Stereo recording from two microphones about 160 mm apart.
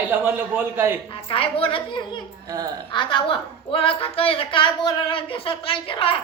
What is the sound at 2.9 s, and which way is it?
Speech, 30° left (ahead or behind).